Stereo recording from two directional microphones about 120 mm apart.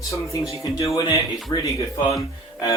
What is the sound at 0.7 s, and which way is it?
Speech, 25° left (ahead or behind).